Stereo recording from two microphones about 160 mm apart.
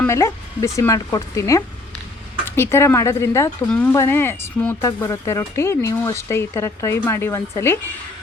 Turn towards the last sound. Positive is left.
turn(degrees=20)  # may be behind; listen again after turning